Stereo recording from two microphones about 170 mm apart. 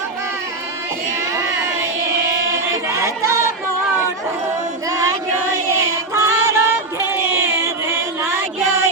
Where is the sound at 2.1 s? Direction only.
15° right (ahead or behind).